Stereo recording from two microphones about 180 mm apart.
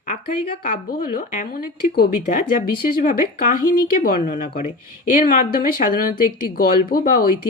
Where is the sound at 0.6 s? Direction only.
55° left (ahead or behind).